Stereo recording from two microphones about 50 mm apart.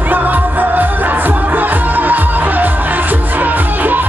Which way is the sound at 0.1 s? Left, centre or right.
Right.